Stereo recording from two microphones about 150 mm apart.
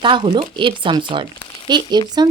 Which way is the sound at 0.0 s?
30° right (ahead or behind).